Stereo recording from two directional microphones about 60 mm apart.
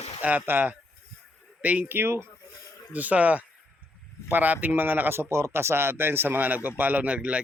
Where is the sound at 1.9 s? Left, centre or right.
Right.